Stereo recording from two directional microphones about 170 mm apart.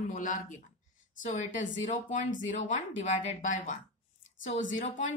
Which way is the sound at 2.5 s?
45° left (ahead or behind).